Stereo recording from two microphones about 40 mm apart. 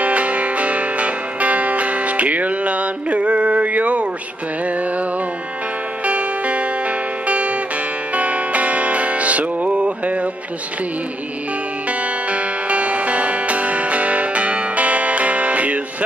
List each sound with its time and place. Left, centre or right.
0.0 s music: right
6.0 s music: right
11.9 s music: right